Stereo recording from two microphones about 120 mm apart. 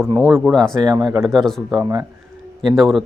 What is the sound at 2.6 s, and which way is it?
Speech, centre (ahead or behind).